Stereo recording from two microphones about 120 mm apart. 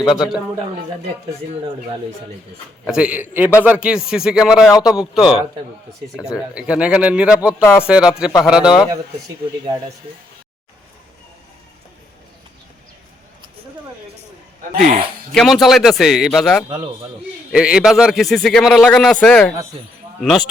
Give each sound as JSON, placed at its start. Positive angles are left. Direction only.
{"t": 0.0, "sound": "a man's voice", "side_deg": 0}
{"t": 2.8, "sound": "a man's voice", "side_deg": -10}
{"t": 7.6, "sound": "speech", "side_deg": 20}
{"t": 7.9, "sound": "a man's voice", "side_deg": -5}
{"t": 15.4, "sound": "a man's voice", "side_deg": 0}
{"t": 16.6, "sound": "a man's voice", "side_deg": -55}
{"t": 17.5, "sound": "a man's voice", "side_deg": -5}